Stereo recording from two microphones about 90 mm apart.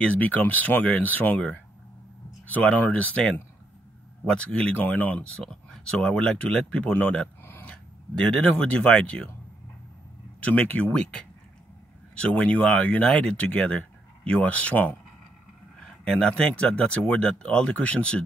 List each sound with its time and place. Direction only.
0.0 s speech: 15° left (ahead or behind)
10.4 s speech: 15° left (ahead or behind)
12.2 s speech: 15° left (ahead or behind)
16.0 s speech: 10° left (ahead or behind)